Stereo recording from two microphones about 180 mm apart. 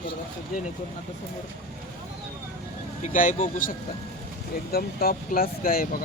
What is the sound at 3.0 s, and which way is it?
Speech, 45° left (ahead or behind).